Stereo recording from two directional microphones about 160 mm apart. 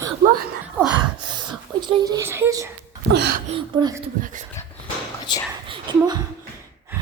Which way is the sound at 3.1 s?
90° right.